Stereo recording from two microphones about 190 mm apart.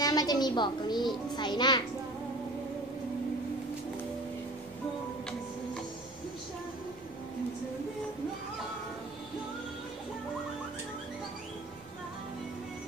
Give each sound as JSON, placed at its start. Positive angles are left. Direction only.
{"t": 0.0, "sound": "a woman's voice", "side_deg": 20}